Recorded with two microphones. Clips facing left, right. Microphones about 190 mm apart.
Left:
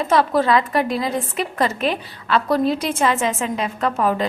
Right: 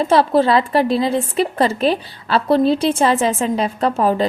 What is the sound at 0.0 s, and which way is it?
Speech, 30° right (ahead or behind).